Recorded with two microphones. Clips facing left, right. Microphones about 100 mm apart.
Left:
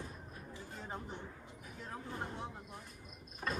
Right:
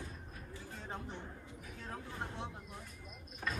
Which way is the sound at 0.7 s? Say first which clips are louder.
Even; 10° left (ahead or behind).